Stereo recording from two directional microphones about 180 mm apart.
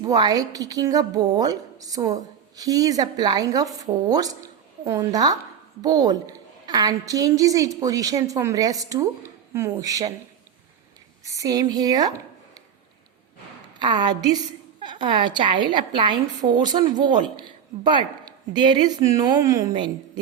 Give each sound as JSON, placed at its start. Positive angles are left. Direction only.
{"t": 0.0, "sound": "a woman's voice", "side_deg": -20}
{"t": 11.3, "sound": "a woman's voice", "side_deg": -20}
{"t": 13.8, "sound": "a woman's voice", "side_deg": -25}